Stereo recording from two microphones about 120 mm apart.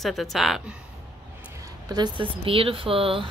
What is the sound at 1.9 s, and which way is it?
A woman's voice, 40° right (ahead or behind).